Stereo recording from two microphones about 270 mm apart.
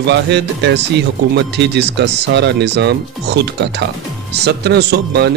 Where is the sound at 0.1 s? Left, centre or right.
Right.